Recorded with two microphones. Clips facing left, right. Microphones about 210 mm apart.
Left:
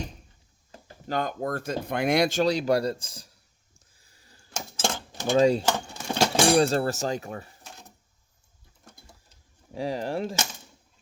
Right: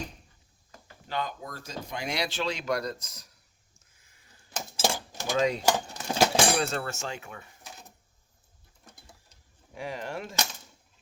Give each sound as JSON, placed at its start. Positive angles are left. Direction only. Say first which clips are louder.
{"t": 0.7, "sound": "speech", "louder": "left 6 dB", "side_deg": 40}
{"t": 3.8, "sound": "a sound", "louder": "left 4 dB", "side_deg": 35}
{"t": 4.8, "sound": "cutlery", "louder": "right 1 dB", "side_deg": -10}
{"t": 5.4, "sound": "speech", "louder": "left 6 dB", "side_deg": 30}
{"t": 5.6, "sound": "a sound", "louder": "right 1 dB", "side_deg": -5}
{"t": 6.6, "sound": "speech", "louder": "left 8 dB", "side_deg": 35}
{"t": 9.7, "sound": "speech", "louder": "left 7 dB", "side_deg": 35}